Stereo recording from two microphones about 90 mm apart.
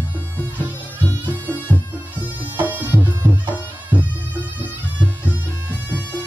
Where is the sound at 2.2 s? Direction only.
20° right (ahead or behind).